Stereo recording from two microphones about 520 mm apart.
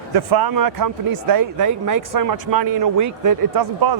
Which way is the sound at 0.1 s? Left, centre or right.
Right.